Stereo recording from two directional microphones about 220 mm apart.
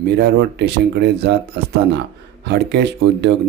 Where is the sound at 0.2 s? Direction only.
50° right (ahead or behind).